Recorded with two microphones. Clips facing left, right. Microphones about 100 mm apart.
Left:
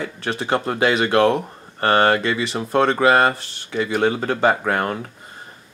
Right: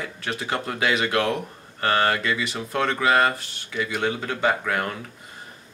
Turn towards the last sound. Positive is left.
turn(degrees=35)  # may be behind; listen again after turning